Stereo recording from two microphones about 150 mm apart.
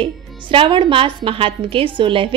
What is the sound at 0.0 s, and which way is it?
A woman's voice, 35° right (ahead or behind).